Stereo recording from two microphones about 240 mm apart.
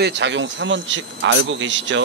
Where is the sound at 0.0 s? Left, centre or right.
Right.